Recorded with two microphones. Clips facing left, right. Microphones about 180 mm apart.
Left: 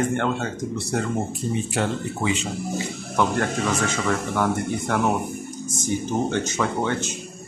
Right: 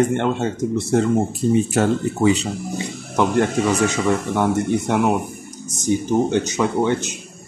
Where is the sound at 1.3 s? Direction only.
40° right (ahead or behind).